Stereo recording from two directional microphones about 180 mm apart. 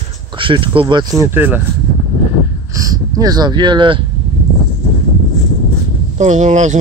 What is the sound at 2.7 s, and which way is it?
Speech, 20° right (ahead or behind).